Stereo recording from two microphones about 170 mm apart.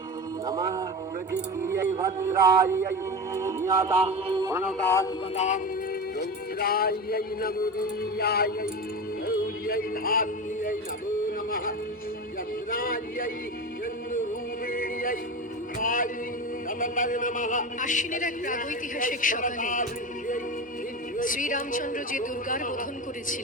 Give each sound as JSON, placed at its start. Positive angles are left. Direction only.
{"t": 0.4, "sound": "speech", "side_deg": -20}
{"t": 4.0, "sound": "a man's voice", "side_deg": -30}
{"t": 4.4, "sound": "speech", "side_deg": -15}
{"t": 4.8, "sound": "a man's voice", "side_deg": 15}
{"t": 5.3, "sound": "music", "side_deg": 40}
{"t": 6.1, "sound": "music", "side_deg": 65}
{"t": 11.3, "sound": "a sound", "side_deg": 60}
{"t": 12.7, "sound": "a sound", "side_deg": 60}
{"t": 14.7, "sound": "yodeling", "side_deg": 55}
{"t": 15.8, "sound": "a man's voice", "side_deg": 55}